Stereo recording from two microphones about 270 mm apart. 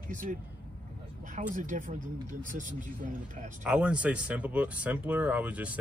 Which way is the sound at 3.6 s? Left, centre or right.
Centre.